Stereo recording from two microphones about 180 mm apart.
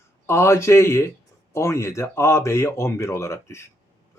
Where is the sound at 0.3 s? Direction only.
15° left (ahead or behind).